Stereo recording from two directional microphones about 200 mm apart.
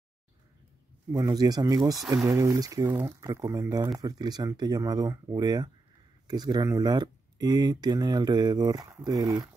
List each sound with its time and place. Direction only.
1.1 s speech: 20° right (ahead or behind)